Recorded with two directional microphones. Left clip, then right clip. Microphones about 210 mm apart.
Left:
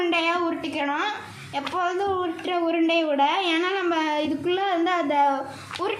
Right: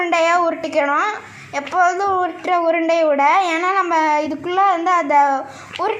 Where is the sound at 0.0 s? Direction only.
25° right (ahead or behind).